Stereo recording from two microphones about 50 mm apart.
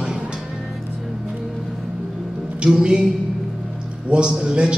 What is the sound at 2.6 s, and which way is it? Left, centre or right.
Speech, centre.